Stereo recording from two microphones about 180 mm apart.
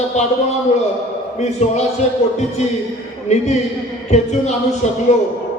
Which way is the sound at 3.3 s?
40° left (ahead or behind).